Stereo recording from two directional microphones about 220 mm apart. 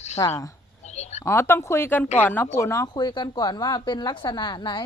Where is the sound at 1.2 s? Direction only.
10° left (ahead or behind).